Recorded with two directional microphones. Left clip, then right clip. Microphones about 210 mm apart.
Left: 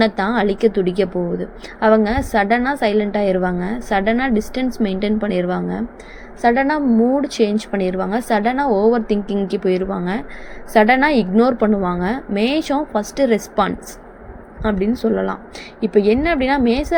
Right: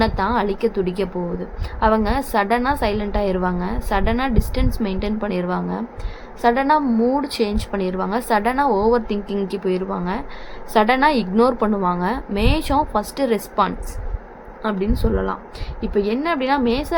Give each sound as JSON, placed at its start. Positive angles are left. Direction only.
{"t": 0.0, "sound": "a woman's voice", "side_deg": 10}